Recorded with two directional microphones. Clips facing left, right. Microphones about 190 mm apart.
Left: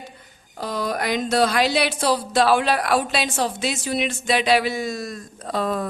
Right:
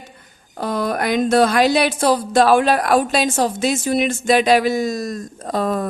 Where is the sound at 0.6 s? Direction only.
55° right (ahead or behind).